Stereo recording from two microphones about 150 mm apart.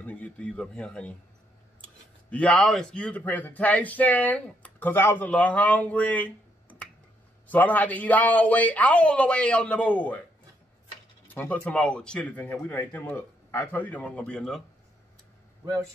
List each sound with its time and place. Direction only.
0.0 s a man's voice: 10° left (ahead or behind)
11.3 s speech: 10° left (ahead or behind)